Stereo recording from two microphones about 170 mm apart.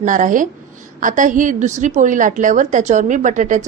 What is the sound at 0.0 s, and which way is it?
A woman's voice, 50° right (ahead or behind).